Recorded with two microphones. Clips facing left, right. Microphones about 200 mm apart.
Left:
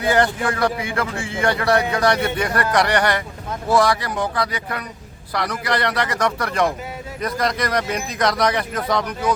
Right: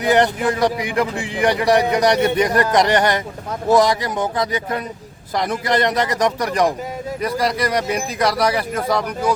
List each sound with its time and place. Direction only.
0.0 s speech: 20° right (ahead or behind)